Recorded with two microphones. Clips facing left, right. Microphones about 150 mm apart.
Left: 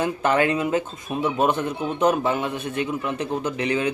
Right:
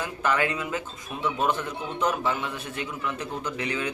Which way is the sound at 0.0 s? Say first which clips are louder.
Left 6 dB; 30° left (ahead or behind).